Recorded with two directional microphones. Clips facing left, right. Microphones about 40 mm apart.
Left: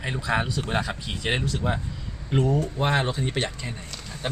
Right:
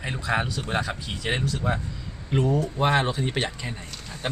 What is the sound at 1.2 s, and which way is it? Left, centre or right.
Speech, left.